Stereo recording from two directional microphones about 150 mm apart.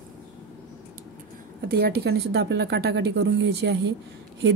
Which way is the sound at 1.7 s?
90° right.